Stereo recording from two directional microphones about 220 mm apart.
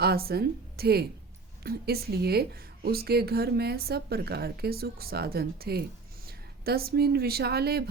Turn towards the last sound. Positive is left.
turn(degrees=-45)  # may be behind; listen again after turning